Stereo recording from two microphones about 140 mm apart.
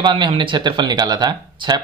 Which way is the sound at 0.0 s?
35° right (ahead or behind).